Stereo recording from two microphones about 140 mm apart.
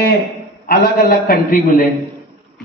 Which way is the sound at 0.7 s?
90° left.